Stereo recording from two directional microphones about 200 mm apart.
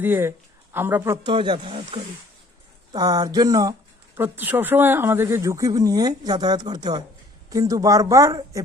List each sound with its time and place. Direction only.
0.0 s speech: 10° right (ahead or behind)
1.3 s speech: 25° right (ahead or behind)